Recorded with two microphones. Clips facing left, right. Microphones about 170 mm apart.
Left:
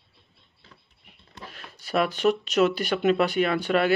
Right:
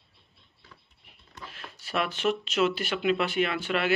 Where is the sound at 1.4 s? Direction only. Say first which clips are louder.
Left 1 dB; 40° left (ahead or behind).